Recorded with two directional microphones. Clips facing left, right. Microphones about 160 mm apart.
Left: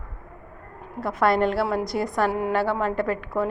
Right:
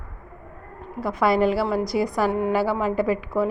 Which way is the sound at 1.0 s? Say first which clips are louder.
Right 1 dB; centre (ahead or behind).